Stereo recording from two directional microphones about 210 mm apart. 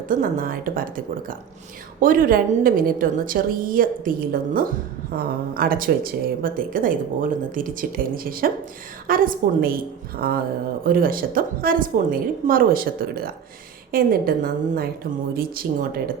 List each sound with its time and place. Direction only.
0.1 s a woman's voice: 40° right (ahead or behind)